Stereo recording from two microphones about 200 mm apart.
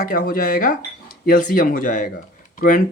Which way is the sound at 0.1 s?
45° left (ahead or behind).